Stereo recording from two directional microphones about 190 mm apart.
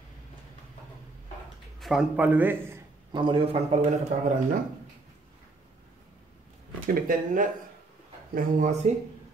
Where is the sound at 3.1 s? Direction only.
25° right (ahead or behind).